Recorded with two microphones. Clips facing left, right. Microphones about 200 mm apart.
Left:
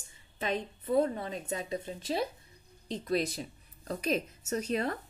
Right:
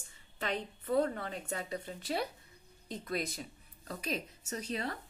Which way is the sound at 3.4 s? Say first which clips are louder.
Left 5 dB; 40° left (ahead or behind).